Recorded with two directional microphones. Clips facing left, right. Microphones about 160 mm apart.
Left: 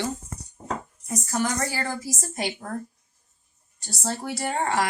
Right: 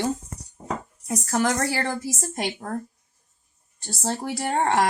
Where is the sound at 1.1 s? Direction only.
75° right (ahead or behind).